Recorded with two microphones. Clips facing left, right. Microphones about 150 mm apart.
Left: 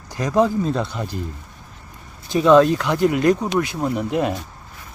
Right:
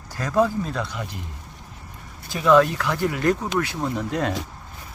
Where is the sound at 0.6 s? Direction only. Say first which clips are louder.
Left 6 dB; 30° left (ahead or behind).